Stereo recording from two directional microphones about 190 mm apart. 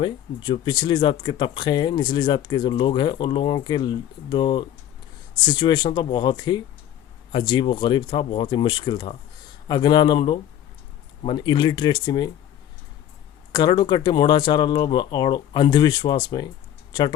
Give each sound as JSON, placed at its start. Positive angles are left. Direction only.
{"t": 0.0, "sound": "speech", "side_deg": 25}
{"t": 13.5, "sound": "speech", "side_deg": 20}